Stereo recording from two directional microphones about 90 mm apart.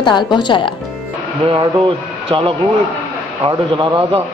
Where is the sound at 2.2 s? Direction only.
80° right.